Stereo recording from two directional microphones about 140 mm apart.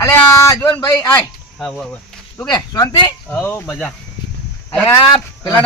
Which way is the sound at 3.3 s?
15° left (ahead or behind).